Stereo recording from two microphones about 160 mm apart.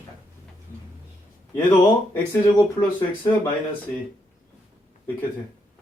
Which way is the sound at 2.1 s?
20° left (ahead or behind).